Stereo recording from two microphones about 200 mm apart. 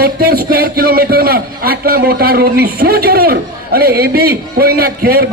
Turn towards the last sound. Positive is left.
turn(degrees=-50)  # may be behind; listen again after turning